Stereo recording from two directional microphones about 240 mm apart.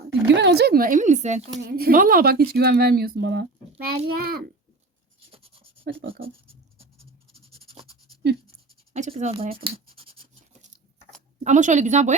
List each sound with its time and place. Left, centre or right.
0.3 s speech: right
1.6 s speech: right
5.3 s writing: right
5.8 s a sound: right
6.1 s writing: right
8.9 s speech: right
9.6 s scratch: right
11.4 s speech: right